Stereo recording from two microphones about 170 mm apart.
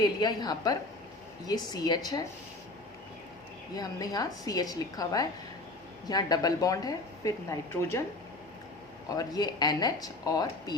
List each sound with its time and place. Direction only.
0.0 s speech: 25° left (ahead or behind)
3.8 s speech: 20° left (ahead or behind)
9.0 s speech: 20° left (ahead or behind)